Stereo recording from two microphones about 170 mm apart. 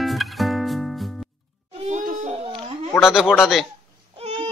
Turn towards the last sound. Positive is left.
turn(degrees=-35)  # may be behind; listen again after turning